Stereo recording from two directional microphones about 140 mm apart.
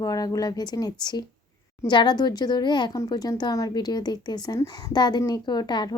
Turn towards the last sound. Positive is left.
turn(degrees=30)  # may be behind; listen again after turning